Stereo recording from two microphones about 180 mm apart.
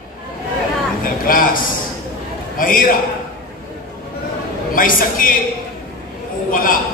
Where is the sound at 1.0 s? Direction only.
50° left (ahead or behind).